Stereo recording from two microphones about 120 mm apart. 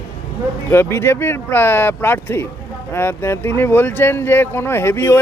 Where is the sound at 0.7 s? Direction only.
20° left (ahead or behind).